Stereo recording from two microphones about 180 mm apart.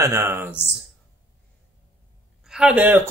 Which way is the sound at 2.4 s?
5° right (ahead or behind).